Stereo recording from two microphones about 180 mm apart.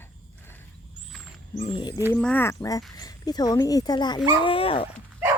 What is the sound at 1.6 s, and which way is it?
Speech, 25° left (ahead or behind).